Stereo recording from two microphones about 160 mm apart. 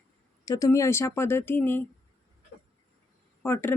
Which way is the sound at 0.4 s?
20° left (ahead or behind).